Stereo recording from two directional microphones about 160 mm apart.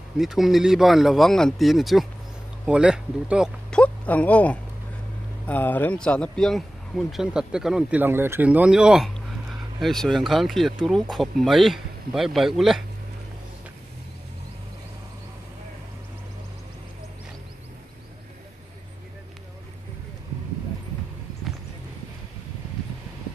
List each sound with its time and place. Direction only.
0.2 s speech: centre (ahead or behind)
3.7 s speech: 10° left (ahead or behind)